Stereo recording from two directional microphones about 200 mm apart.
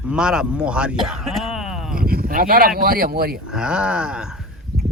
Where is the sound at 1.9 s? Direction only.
50° right (ahead or behind).